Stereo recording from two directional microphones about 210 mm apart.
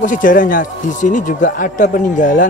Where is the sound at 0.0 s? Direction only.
40° left (ahead or behind).